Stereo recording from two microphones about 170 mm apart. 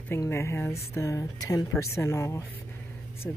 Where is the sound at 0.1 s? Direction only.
15° left (ahead or behind).